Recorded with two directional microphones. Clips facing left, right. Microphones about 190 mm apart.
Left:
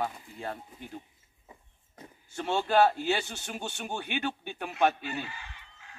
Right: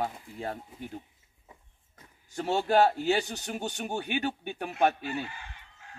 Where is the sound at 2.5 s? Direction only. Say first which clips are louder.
Right 1 dB; 35° right (ahead or behind).